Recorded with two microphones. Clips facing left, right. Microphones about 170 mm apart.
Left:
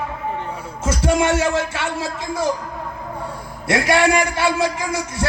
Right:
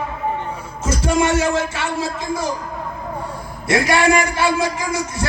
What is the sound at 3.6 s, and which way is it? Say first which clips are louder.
A man's voice: right 1 dB; 65° left (ahead or behind).